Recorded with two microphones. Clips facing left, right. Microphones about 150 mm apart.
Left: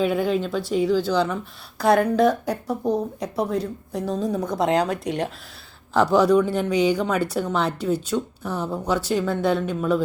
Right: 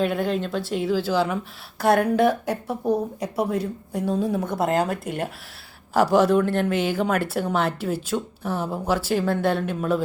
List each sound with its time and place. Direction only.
0.0 s a woman's voice: centre (ahead or behind)